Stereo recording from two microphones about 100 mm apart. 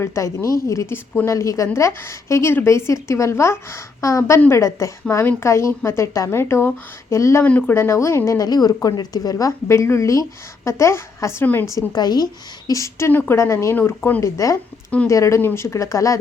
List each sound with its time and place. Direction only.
0.0 s a woman's voice: 30° left (ahead or behind)
7.4 s speech: 15° left (ahead or behind)
7.8 s a woman's voice: 30° left (ahead or behind)
8.4 s speech: 40° left (ahead or behind)
11.6 s speech: 35° left (ahead or behind)
13.1 s a woman's voice: 20° left (ahead or behind)